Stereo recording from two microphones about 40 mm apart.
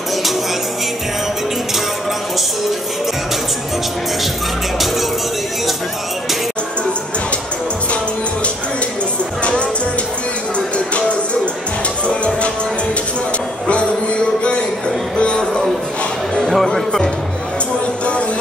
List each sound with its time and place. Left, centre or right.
9.4 s music: left
12.1 s music: left
13.7 s music: left
15.1 s music: left
16.4 s music: centre